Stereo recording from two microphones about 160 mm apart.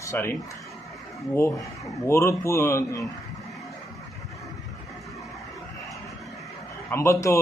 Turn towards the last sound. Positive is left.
turn(degrees=20)  # may be behind; listen again after turning